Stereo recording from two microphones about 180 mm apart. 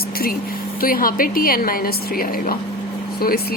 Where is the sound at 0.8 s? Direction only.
50° left (ahead or behind).